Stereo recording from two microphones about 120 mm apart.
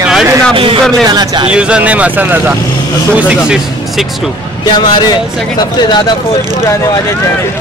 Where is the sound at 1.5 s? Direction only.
10° right (ahead or behind).